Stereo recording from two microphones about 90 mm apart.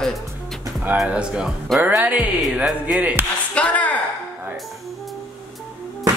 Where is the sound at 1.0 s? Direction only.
10° right (ahead or behind).